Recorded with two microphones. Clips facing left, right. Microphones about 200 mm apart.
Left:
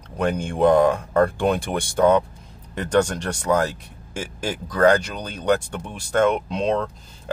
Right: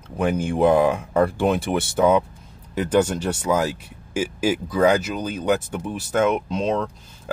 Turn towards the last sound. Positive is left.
turn(degrees=0)  # may be behind; listen again after turning